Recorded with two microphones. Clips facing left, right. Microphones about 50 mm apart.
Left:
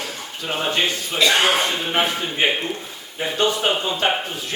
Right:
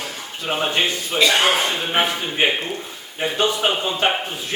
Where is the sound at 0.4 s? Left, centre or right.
Centre.